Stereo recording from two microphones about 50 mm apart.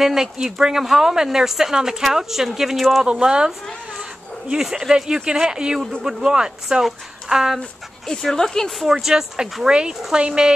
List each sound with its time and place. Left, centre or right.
0.0 s speech: centre
3.1 s speech: centre
8.1 s speech: centre
9.0 s speech: centre